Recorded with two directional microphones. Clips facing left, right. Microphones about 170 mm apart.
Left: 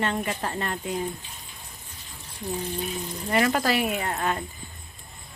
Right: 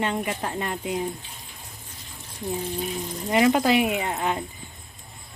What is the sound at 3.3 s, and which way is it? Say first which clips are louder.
Speech: right 4 dB; 15° right (ahead or behind).